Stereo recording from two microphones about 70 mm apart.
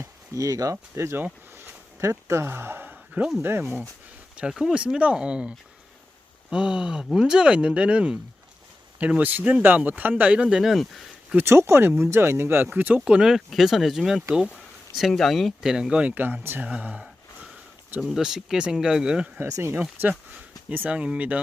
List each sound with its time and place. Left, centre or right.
0.0 s speech: right
4.4 s speech: centre
10.3 s speech: centre
10.6 s speech: centre
11.3 s speech: right
13.1 s speech: centre
14.3 s speech: centre
15.1 s speech: centre; by 16.6 s right
16.6 s speech: centre
18.0 s speech: centre
19.5 s speech: right
19.8 s speech: right